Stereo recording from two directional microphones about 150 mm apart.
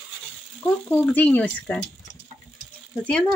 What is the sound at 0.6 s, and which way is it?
Speech, 10° left (ahead or behind).